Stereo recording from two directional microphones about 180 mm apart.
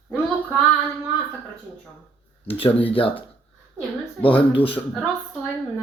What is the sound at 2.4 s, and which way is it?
Speech, 30° left (ahead or behind).